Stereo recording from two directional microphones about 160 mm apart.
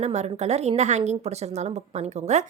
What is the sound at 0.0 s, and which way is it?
A woman's voice, 45° right (ahead or behind).